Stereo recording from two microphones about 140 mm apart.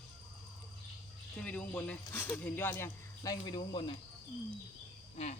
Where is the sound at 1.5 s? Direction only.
10° left (ahead or behind).